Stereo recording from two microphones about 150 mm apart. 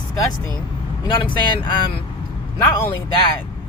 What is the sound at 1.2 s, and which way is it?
Speech, 35° left (ahead or behind).